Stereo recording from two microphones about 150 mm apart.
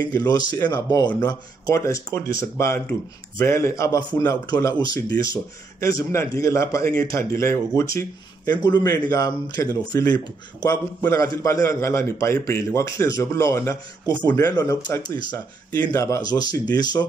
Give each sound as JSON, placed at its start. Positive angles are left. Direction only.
{"t": 0.1, "sound": "a man's voice", "side_deg": 25}